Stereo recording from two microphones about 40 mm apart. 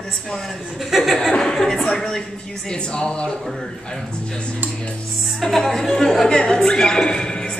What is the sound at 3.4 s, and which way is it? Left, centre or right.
Speech, centre.